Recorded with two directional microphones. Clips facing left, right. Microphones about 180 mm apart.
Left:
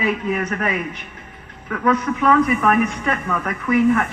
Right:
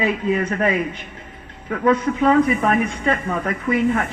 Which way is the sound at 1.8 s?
30° right (ahead or behind).